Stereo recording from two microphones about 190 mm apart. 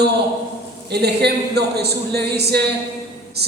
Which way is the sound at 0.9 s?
60° right (ahead or behind).